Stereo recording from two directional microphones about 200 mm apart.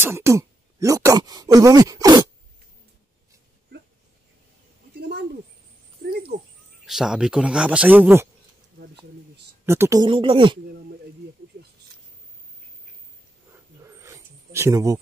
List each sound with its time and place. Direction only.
0.0 s speech: 15° right (ahead or behind)
6.9 s speech: 5° right (ahead or behind)
9.7 s speech: 15° right (ahead or behind)
13.9 s a sound: 15° right (ahead or behind)